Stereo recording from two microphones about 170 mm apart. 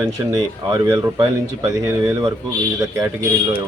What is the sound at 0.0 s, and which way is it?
Speech, 20° right (ahead or behind).